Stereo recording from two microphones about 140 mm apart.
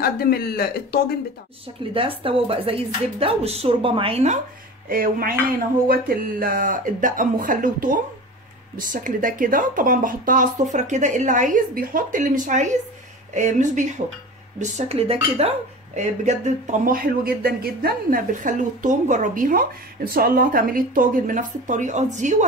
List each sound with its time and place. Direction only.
0.0 s speech: 90° left
2.0 s speech: 40° right (ahead or behind)
4.8 s speech: 90° right; by 19.6 s 75° right (ahead or behind)
20.1 s speech: 90° right; by 22.4 s 60° right (ahead or behind)